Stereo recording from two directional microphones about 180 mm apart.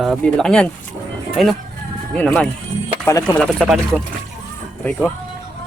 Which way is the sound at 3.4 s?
Centre (ahead or behind).